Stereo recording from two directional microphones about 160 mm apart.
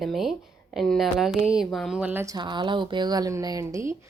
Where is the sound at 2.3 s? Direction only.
30° right (ahead or behind).